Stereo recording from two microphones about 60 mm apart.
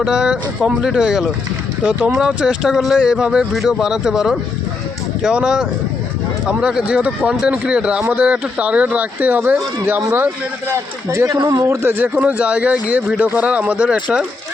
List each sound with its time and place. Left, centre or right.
0.0 s a man's voice: centre
1.8 s a man's voice: right
11.3 s a man's voice: right
11.9 s speech: right